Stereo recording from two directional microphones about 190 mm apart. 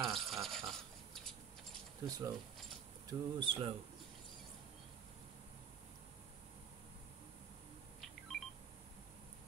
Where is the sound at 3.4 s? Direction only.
25° right (ahead or behind).